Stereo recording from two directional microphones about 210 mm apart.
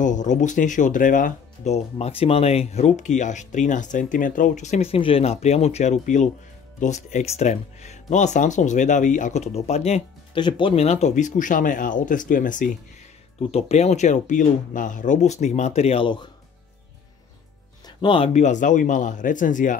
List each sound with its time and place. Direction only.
0.0 s speech: 35° left (ahead or behind)
17.8 s speech: 25° left (ahead or behind)